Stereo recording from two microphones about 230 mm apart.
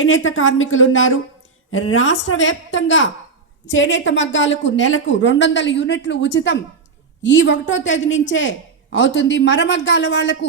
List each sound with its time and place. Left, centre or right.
0.0 s a woman's voice: left